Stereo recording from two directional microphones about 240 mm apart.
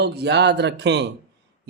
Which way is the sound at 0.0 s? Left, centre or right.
Right.